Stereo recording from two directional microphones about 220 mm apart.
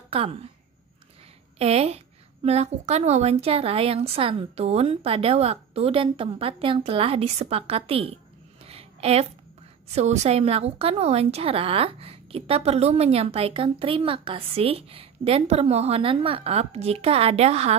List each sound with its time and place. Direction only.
0.1 s a woman's voice: 25° right (ahead or behind)
1.6 s a woman's voice: 30° right (ahead or behind)
8.6 s a sound: 25° right (ahead or behind)
9.9 s a woman's voice: 30° right (ahead or behind)